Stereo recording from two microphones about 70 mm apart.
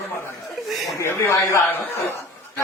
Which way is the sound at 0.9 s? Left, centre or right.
Left.